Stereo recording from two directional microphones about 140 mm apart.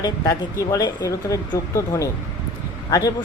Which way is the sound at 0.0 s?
25° left (ahead or behind).